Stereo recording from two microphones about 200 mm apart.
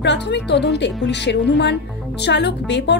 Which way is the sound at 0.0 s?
60° left (ahead or behind).